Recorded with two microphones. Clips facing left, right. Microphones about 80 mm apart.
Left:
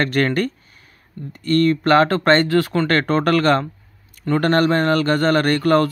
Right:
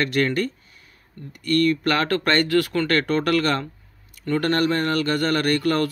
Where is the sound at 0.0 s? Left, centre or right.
Left.